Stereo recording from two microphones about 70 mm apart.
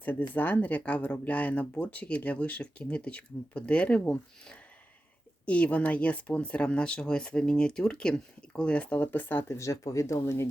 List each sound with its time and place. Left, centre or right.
0.0 s speech: left
9.0 s speech: left